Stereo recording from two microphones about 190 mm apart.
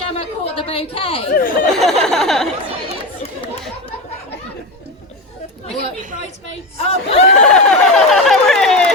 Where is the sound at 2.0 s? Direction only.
Centre (ahead or behind).